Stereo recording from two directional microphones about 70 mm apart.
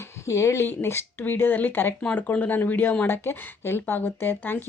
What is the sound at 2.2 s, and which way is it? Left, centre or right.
Speech, left.